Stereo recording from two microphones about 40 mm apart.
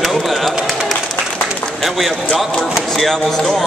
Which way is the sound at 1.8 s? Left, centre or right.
Centre.